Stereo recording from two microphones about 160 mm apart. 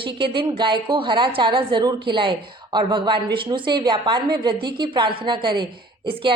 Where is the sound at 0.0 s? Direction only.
30° right (ahead or behind).